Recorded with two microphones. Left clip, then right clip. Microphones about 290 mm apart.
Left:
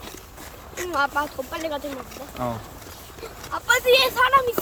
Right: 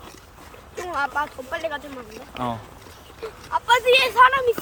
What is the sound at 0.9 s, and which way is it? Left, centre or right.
Speech, centre.